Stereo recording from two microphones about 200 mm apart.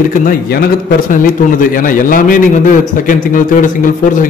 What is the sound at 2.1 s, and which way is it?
A man's voice, 40° left (ahead or behind).